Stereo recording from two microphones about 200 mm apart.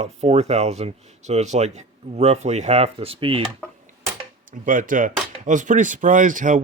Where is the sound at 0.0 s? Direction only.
35° right (ahead or behind).